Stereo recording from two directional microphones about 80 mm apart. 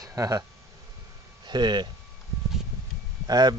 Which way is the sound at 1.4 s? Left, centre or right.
Right.